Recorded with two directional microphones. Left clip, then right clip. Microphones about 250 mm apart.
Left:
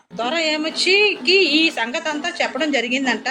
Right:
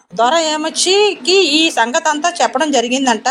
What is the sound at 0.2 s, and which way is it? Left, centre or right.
A woman's voice, right.